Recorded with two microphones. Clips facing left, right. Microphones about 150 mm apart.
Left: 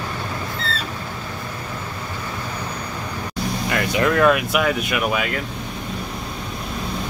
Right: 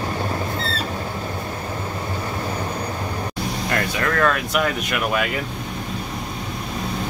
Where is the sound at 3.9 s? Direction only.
15° left (ahead or behind).